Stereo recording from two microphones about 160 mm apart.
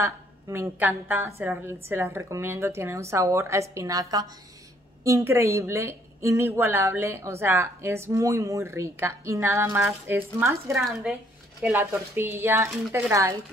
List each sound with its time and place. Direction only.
0.0 s a woman's voice: 15° right (ahead or behind)
10.8 s a woman's voice: 5° right (ahead or behind)
11.6 s a woman's voice: 15° right (ahead or behind)